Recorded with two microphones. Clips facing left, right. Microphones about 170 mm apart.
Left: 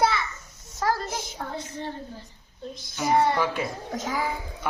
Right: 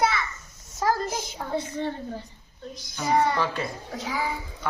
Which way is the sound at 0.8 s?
15° right (ahead or behind).